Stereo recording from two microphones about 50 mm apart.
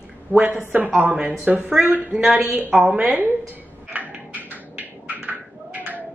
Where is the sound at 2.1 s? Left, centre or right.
Centre.